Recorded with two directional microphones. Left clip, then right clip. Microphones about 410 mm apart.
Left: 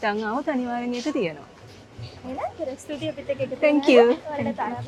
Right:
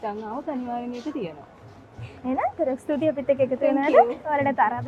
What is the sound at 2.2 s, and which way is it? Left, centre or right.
Speech, right.